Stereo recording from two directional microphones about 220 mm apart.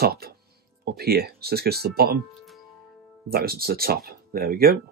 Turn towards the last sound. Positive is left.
turn(degrees=-45)  # may be behind; listen again after turning